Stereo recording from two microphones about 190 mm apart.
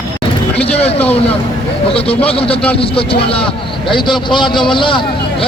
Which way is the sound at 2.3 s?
30° left (ahead or behind).